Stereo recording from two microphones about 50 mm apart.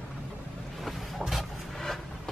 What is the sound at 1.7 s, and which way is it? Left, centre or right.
Vehicle, centre.